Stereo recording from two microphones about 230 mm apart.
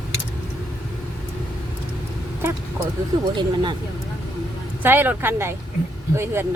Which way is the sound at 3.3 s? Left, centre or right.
Centre.